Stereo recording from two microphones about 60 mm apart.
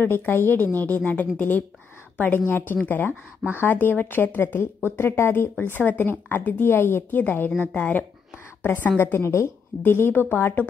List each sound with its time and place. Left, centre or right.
0.0 s a woman's voice: left